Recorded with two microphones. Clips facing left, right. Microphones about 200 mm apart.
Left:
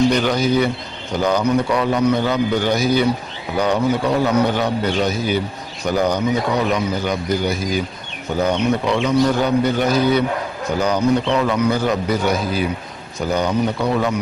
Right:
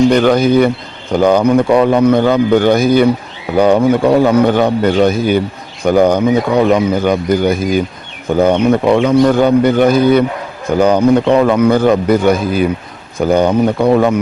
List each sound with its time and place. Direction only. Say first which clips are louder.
0.1 s a man's voice: right 7 dB; 55° right (ahead or behind)